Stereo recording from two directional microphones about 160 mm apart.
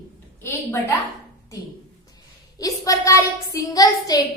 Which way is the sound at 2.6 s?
20° left (ahead or behind).